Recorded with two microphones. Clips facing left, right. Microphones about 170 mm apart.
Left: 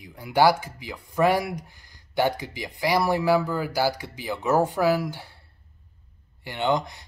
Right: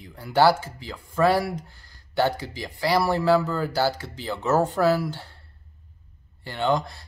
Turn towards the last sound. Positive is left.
turn(degrees=20)  # may be behind; listen again after turning